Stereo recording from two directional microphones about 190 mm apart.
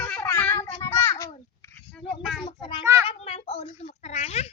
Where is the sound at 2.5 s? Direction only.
25° left (ahead or behind).